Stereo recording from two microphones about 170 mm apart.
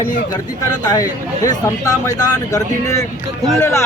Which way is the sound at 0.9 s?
20° left (ahead or behind).